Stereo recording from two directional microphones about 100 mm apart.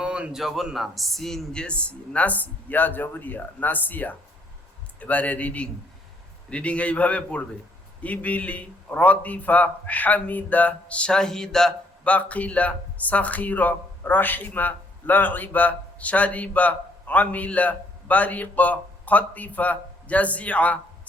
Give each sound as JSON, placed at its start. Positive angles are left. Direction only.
{"t": 0.0, "sound": "a man's voice", "side_deg": -10}